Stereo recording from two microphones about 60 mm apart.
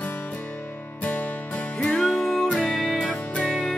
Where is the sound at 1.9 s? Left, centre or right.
Centre.